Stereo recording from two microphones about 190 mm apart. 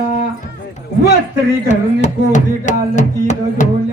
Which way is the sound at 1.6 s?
40° left (ahead or behind).